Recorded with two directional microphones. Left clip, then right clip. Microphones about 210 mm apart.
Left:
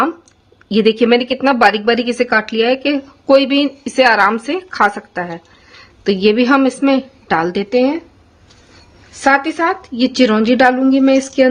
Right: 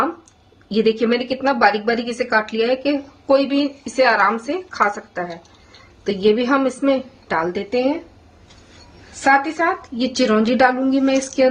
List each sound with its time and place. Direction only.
0.7 s a woman's voice: 40° left (ahead or behind)
9.2 s a woman's voice: 45° left (ahead or behind)